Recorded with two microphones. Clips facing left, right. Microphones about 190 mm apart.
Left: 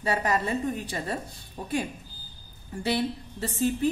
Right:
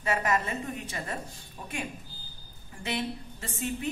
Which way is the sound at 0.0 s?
30° left (ahead or behind).